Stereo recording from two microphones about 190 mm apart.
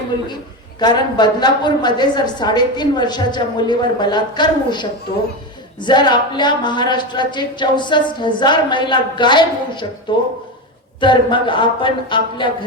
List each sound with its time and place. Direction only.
0.8 s a woman's voice: 20° left (ahead or behind)